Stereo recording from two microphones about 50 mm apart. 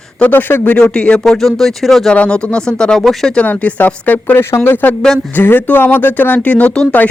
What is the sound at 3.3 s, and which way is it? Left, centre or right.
Speech, left.